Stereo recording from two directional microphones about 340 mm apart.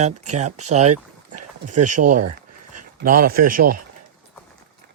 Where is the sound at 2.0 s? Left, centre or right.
Right.